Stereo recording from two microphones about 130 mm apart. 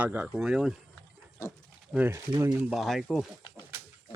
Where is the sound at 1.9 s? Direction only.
15° right (ahead or behind).